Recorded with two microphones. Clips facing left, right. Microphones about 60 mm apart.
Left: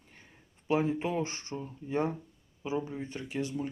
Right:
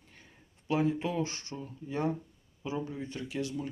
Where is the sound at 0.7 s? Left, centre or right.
Left.